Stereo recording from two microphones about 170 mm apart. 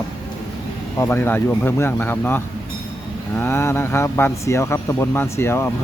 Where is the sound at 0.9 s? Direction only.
15° left (ahead or behind).